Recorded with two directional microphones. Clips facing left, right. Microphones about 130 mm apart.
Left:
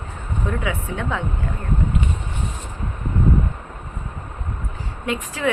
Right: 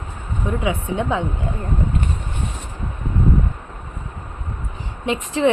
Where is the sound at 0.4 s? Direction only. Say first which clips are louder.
Right 4 dB; 20° right (ahead or behind).